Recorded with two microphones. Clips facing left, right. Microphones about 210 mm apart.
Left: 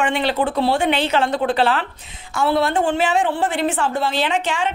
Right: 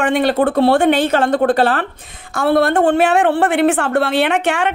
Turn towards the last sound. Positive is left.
turn(degrees=-65)  # may be behind; listen again after turning